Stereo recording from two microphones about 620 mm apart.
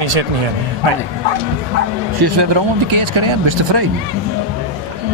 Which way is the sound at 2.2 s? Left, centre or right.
Right.